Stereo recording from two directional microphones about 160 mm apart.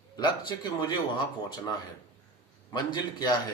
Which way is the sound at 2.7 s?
30° left (ahead or behind).